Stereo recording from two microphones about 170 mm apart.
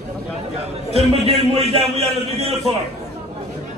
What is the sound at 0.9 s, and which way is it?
A man's voice, 35° right (ahead or behind).